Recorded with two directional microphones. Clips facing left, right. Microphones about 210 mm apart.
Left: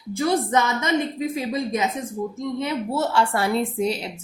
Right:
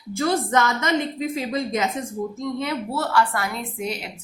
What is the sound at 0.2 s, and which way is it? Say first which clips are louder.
Speech: even; 10° left (ahead or behind).